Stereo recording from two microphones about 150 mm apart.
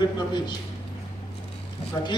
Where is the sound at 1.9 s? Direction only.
25° left (ahead or behind).